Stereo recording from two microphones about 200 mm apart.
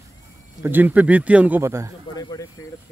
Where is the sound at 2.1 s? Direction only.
20° left (ahead or behind).